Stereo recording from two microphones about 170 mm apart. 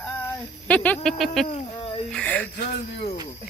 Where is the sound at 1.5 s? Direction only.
30° left (ahead or behind).